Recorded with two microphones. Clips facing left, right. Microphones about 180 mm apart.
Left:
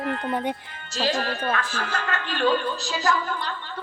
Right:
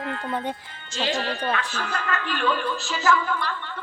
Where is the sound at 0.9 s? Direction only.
45° left (ahead or behind).